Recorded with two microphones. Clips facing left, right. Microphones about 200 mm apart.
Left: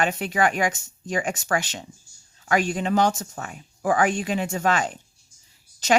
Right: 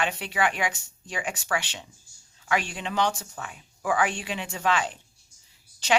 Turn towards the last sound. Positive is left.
turn(degrees=40)  # may be behind; listen again after turning